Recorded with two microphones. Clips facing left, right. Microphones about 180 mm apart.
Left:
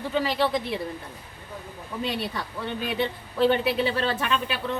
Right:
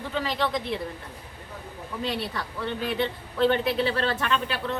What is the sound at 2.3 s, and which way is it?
A man's voice, 10° left (ahead or behind).